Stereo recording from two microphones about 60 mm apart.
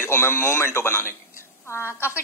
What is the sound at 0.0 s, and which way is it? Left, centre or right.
A woman's voice, left.